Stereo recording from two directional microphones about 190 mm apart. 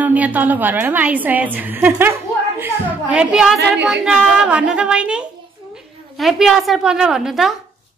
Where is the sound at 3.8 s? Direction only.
5° right (ahead or behind).